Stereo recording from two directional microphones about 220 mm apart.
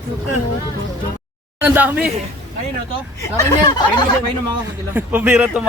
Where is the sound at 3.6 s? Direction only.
20° left (ahead or behind).